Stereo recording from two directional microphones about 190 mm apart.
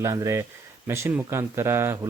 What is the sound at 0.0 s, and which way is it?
Speech, 15° right (ahead or behind).